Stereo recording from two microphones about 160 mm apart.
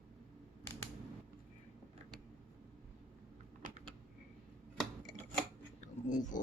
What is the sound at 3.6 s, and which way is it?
Typing, 55° right (ahead or behind).